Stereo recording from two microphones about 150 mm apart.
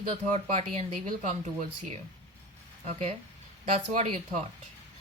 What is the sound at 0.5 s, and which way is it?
A woman's voice, 45° right (ahead or behind).